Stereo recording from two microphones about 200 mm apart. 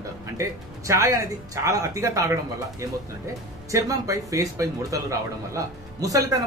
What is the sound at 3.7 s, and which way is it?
Speech, 15° right (ahead or behind).